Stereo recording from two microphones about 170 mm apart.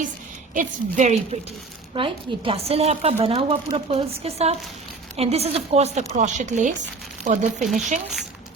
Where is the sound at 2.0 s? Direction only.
35° right (ahead or behind); by 7.4 s 50° right (ahead or behind).